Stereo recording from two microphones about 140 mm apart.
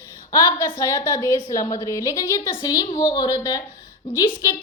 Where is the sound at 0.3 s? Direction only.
25° left (ahead or behind).